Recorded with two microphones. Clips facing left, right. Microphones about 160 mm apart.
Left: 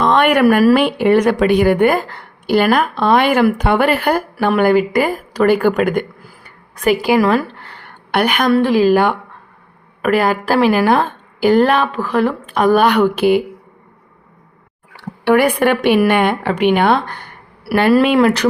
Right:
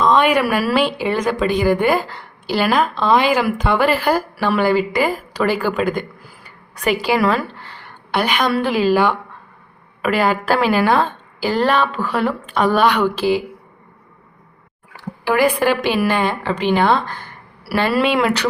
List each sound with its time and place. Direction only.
0.0 s a woman's voice: 60° left (ahead or behind)
15.2 s a woman's voice: 65° left (ahead or behind); by 18.4 s 45° left (ahead or behind)